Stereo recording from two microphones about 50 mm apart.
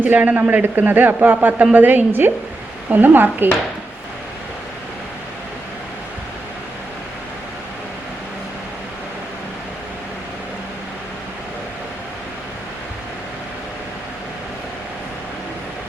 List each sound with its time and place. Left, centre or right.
0.0 s a man's voice: right